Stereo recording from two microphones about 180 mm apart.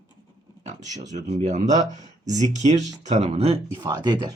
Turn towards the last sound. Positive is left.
turn(degrees=-20)  # may be behind; listen again after turning